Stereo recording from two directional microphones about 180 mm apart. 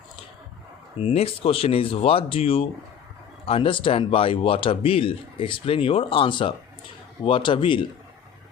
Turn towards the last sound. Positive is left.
turn(degrees=30)  # may be behind; listen again after turning